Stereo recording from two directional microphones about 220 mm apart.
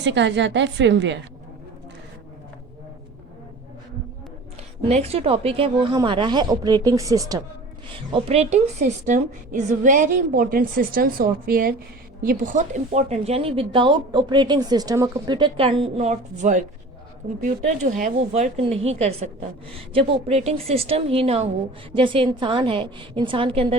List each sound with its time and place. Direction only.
0.0 s a woman's voice: 55° right (ahead or behind)
4.9 s a woman's voice: 30° right (ahead or behind)
18.0 s a woman's voice: 35° right (ahead or behind)